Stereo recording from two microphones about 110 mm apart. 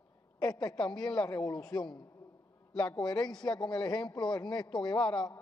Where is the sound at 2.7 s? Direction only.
10° left (ahead or behind).